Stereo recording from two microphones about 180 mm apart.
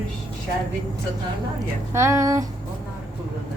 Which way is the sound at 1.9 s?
15° right (ahead or behind).